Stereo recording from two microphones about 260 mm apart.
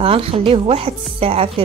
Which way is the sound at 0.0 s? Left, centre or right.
Right.